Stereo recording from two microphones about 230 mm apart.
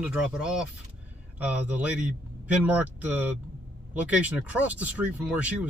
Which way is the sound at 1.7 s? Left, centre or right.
Centre.